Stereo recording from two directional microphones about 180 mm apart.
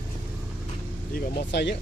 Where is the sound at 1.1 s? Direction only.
65° left (ahead or behind).